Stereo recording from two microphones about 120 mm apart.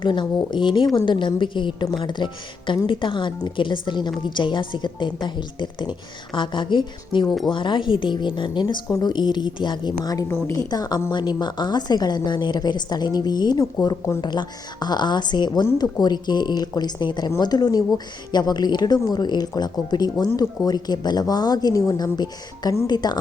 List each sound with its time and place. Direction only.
0.0 s a woman's voice: 40° left (ahead or behind); by 10.6 s 20° left (ahead or behind)
10.7 s a woman's voice: 35° left (ahead or behind)